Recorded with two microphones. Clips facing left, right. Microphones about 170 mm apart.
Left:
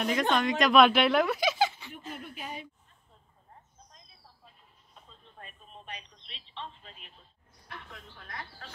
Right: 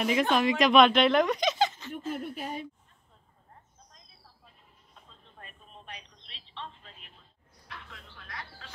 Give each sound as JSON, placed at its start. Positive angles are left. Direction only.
{"t": 0.0, "sound": "speech", "side_deg": -5}
{"t": 2.1, "sound": "a sound", "side_deg": -45}
{"t": 5.4, "sound": "telephone", "side_deg": 0}